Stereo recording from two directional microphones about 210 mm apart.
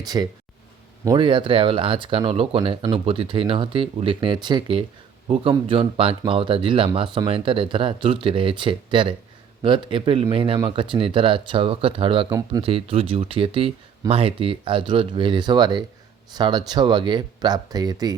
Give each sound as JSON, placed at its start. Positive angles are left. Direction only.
{"t": 0.0, "sound": "speech", "side_deg": -20}